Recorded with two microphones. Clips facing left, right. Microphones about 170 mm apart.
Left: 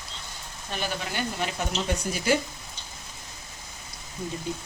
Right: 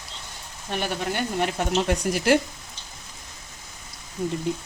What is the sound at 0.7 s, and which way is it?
Speech, 60° right (ahead or behind).